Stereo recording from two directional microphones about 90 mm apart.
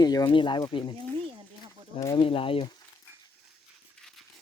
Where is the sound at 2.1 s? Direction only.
85° left.